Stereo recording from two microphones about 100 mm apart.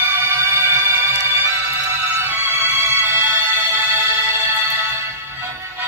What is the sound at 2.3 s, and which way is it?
Music, 20° right (ahead or behind).